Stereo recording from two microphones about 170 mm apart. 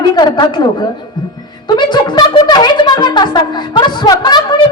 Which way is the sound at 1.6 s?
25° left (ahead or behind).